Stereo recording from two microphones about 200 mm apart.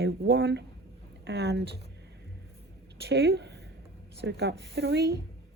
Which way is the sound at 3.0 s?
60° right (ahead or behind).